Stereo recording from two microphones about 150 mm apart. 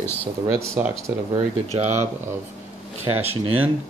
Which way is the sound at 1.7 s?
50° right (ahead or behind).